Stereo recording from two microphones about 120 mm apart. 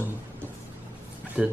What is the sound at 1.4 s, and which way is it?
Speech, 5° right (ahead or behind).